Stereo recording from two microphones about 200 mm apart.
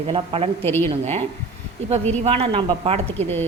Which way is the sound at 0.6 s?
10° left (ahead or behind).